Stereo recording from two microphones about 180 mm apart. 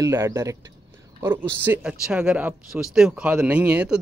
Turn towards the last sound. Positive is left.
turn(degrees=-5)  # may be behind; listen again after turning